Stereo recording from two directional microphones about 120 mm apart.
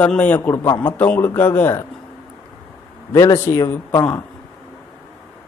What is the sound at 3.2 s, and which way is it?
Speech, 30° left (ahead or behind).